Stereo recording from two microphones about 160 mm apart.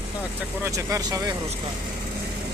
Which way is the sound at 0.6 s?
20° right (ahead or behind).